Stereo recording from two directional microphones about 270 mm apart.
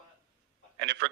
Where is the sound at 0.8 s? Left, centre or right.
Right.